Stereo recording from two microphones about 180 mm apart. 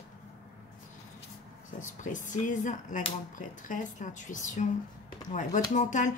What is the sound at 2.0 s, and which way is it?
Speech, 45° left (ahead or behind).